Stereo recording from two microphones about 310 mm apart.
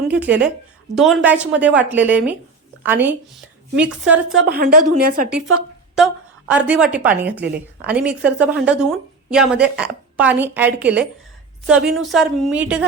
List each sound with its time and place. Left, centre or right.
0.1 s a woman's voice: centre
4.3 s a woman's voice: right
6.5 s a woman's voice: centre